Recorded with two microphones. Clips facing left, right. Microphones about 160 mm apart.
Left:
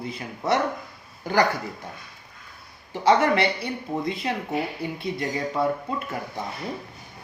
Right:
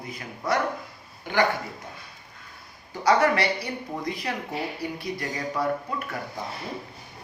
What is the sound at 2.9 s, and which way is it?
Speech, 25° left (ahead or behind).